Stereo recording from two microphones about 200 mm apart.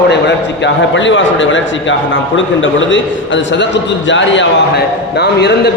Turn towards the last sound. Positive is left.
turn(degrees=55)  # may be behind; listen again after turning